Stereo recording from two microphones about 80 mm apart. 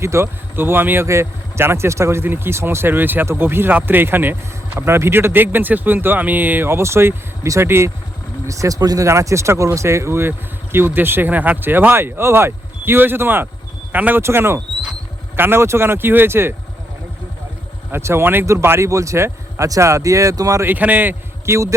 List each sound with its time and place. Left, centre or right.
0.0 s speech: right
8.4 s speech: right
9.0 s speech: right
14.2 s speech: right
17.9 s speech: right
20.7 s a man's voice: right